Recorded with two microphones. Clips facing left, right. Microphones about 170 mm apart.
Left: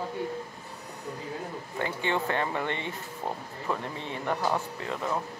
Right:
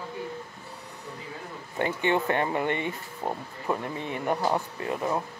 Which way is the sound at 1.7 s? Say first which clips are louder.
Right 4 dB; 20° right (ahead or behind).